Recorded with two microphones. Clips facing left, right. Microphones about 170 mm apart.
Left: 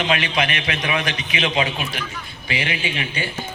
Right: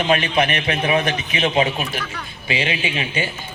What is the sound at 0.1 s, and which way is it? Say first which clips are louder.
A man's voice: right 4 dB; 30° right (ahead or behind).